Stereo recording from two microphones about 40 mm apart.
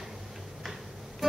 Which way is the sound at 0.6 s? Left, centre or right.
Centre.